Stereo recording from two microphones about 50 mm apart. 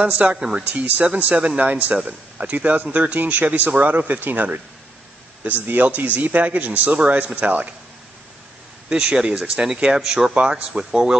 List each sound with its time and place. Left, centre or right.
0.1 s speech: right
0.4 s speech: centre
0.7 s a man's voice: right
8.8 s speech: centre
10.3 s speech: right